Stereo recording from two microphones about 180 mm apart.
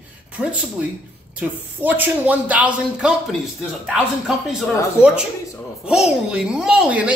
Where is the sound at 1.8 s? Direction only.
10° right (ahead or behind).